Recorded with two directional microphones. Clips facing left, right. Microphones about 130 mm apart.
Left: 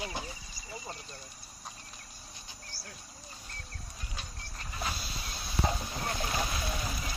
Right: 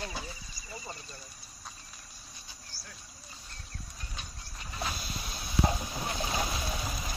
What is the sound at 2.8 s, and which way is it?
Cricket, 90° right.